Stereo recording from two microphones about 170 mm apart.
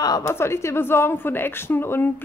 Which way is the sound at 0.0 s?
20° left (ahead or behind).